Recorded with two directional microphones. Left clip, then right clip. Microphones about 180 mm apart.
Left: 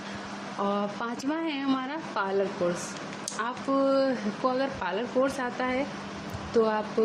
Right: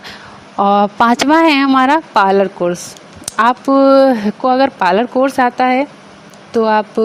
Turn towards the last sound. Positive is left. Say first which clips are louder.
# right 12 dB
turn(degrees=-45)  # may be behind; listen again after turning